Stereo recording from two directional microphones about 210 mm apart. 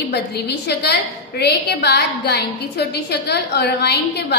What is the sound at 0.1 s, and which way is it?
A woman's voice, 50° left (ahead or behind).